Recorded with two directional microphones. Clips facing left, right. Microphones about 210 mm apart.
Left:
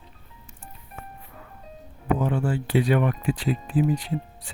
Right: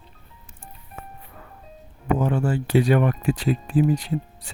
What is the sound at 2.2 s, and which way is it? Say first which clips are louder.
Speech: right 2 dB; 45° right (ahead or behind).